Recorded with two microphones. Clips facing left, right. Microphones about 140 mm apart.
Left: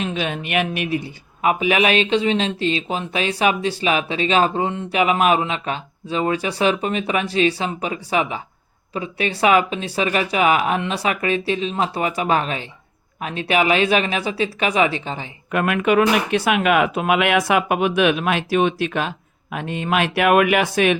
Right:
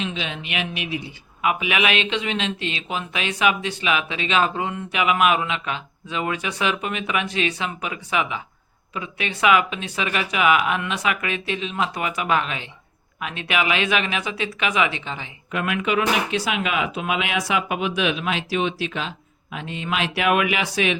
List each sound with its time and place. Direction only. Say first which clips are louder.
0.0 s a man's voice: left 5 dB; 50° left (ahead or behind)
15.5 s speech: left 6 dB; 50° left (ahead or behind)